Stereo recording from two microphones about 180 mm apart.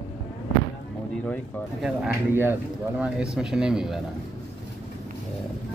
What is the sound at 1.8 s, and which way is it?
Speech, 10° right (ahead or behind).